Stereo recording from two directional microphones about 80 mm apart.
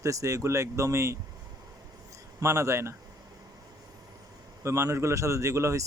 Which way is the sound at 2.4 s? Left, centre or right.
Right.